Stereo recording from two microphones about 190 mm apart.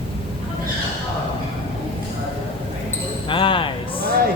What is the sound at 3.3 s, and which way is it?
Speech, 25° left (ahead or behind).